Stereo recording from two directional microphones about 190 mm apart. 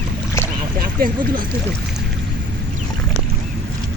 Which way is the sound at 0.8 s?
50° right (ahead or behind).